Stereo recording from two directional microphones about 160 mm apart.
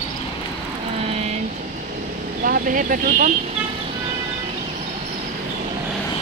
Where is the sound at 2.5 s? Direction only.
65° right (ahead or behind).